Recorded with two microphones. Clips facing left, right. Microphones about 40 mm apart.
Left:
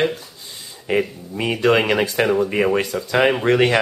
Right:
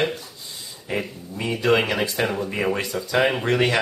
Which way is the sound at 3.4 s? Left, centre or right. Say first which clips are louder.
Left 5 dB; centre.